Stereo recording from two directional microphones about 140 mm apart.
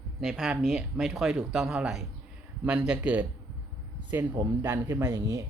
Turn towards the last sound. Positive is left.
turn(degrees=-25)  # may be behind; listen again after turning